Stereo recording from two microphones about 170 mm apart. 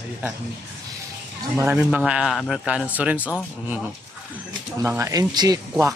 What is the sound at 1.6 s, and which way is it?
A man's voice, 10° right (ahead or behind).